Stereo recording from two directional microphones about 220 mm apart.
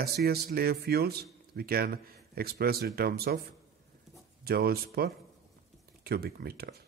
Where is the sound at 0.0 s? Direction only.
45° right (ahead or behind).